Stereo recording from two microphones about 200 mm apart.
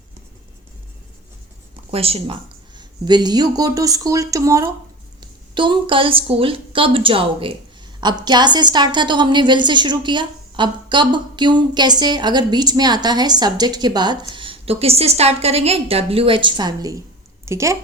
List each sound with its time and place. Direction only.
1.9 s a woman's voice: 30° right (ahead or behind); by 17.7 s 15° right (ahead or behind)